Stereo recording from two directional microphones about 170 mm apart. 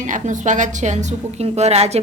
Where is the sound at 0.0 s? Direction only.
45° right (ahead or behind).